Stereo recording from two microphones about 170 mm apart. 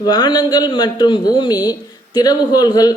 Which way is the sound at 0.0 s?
25° left (ahead or behind).